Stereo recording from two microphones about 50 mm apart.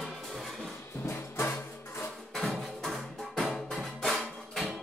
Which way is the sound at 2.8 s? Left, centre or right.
Centre.